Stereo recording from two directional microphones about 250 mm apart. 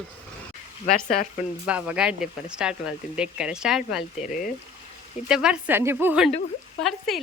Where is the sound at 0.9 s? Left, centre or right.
Left.